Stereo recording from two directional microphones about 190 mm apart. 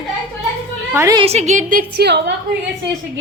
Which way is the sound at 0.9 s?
15° right (ahead or behind).